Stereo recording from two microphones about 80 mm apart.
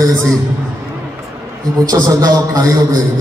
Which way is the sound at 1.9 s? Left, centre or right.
Right.